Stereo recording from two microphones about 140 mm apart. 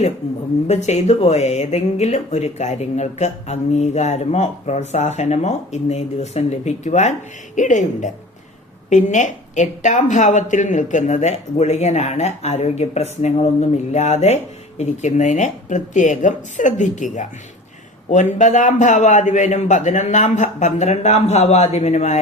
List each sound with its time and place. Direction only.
0.7 s a man's voice: 50° left (ahead or behind)